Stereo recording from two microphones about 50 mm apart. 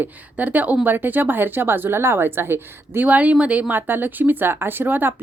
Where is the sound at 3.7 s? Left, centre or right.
Right.